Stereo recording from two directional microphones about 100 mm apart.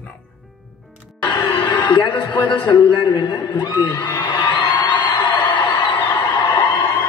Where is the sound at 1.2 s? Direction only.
55° left (ahead or behind).